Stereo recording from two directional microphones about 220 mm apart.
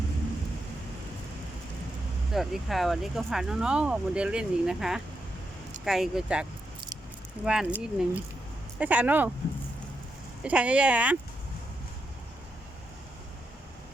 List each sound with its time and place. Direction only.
2.3 s speech: centre (ahead or behind)
10.4 s speech: 5° right (ahead or behind)